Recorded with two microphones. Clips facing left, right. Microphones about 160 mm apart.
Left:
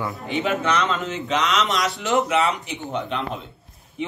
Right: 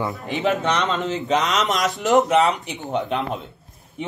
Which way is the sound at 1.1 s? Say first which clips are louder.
Right 2 dB; 40° right (ahead or behind).